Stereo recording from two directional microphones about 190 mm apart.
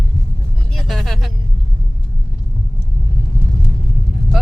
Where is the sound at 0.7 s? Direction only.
Centre (ahead or behind).